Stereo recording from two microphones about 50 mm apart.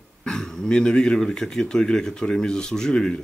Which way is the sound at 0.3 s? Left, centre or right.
Centre.